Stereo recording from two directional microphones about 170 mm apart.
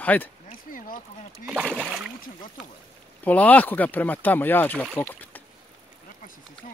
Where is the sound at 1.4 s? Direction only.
Centre (ahead or behind).